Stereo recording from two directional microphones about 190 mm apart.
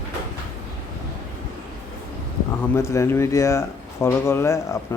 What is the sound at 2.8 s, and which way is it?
A man's voice, 15° left (ahead or behind).